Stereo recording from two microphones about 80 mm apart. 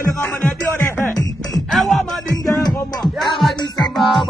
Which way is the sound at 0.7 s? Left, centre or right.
Left.